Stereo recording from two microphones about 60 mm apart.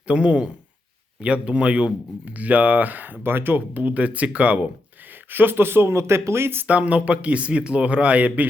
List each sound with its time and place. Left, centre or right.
0.1 s speech: centre
5.3 s speech: right
6.7 s speech: right